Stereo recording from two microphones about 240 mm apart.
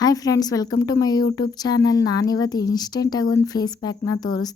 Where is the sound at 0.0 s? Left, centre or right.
Centre.